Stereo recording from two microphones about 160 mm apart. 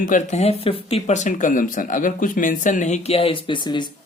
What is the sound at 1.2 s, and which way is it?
Speech, 55° left (ahead or behind).